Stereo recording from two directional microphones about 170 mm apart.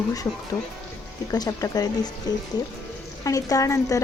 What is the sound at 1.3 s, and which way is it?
Speech, 20° left (ahead or behind).